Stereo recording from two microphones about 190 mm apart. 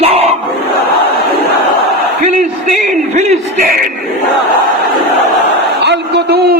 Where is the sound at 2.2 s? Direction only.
40° right (ahead or behind).